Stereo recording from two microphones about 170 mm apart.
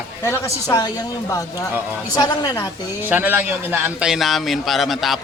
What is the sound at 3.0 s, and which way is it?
Speech, 10° right (ahead or behind).